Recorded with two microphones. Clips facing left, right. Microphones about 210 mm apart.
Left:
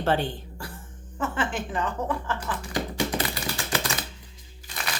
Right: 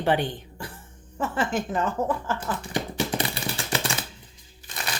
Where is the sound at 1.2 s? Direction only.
40° right (ahead or behind).